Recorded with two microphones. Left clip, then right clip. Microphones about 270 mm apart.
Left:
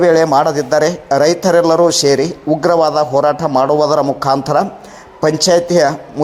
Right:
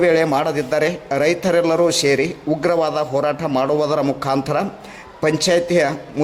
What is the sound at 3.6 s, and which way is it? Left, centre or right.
A man's voice, centre.